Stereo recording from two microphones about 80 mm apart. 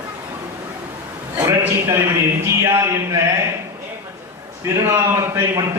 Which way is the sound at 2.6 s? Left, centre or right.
Right.